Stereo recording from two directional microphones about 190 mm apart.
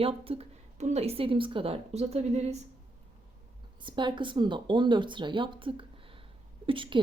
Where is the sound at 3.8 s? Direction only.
25° right (ahead or behind).